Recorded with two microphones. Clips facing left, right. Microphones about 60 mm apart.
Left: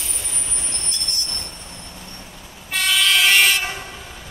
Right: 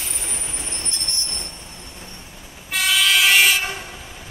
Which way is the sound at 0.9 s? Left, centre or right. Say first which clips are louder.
Left 1 dB; right.